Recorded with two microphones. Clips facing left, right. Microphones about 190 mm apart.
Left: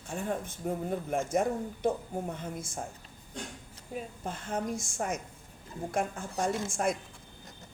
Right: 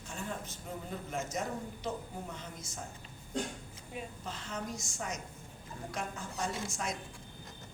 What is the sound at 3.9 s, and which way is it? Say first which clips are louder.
A woman's voice: left 5 dB; 55° left (ahead or behind).